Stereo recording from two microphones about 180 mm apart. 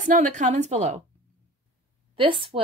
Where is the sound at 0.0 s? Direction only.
45° right (ahead or behind).